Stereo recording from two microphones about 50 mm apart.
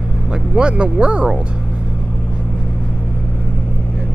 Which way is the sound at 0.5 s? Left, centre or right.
Right.